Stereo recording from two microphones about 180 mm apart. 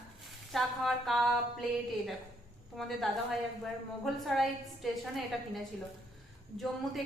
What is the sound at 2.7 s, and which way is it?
A woman's voice, centre (ahead or behind).